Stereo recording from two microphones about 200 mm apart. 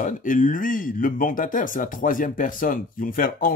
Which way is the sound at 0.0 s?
40° left (ahead or behind).